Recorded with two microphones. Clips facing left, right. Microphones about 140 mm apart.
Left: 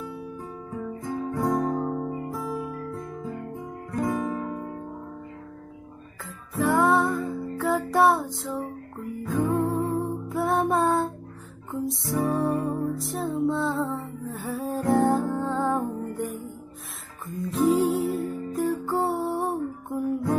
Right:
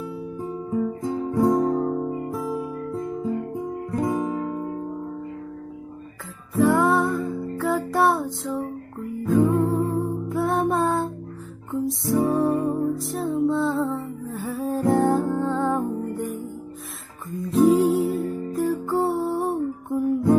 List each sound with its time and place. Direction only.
0.5 s guitar: 25° right (ahead or behind)
2.4 s music: centre (ahead or behind)
2.9 s music: 25° right (ahead or behind)
3.9 s guitar: 20° right (ahead or behind)
6.5 s music: centre (ahead or behind)